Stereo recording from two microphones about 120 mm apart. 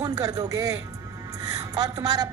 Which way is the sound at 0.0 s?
30° right (ahead or behind).